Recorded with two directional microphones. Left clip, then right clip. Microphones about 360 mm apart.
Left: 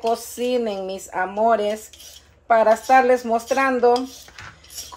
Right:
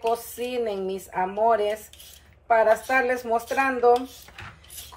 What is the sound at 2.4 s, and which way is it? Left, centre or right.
Speech, left.